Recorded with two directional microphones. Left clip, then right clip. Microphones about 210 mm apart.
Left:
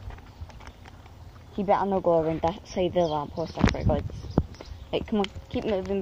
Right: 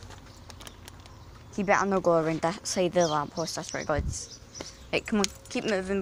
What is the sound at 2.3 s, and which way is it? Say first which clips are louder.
Speech: left 1 dB; 30° right (ahead or behind).